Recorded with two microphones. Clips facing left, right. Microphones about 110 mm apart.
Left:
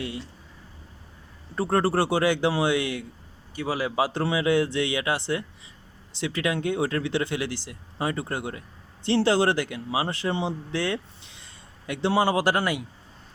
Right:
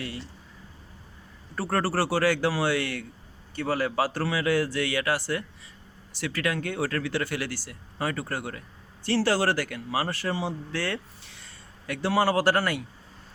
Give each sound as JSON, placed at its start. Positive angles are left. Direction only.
{"t": 1.5, "sound": "speech", "side_deg": 20}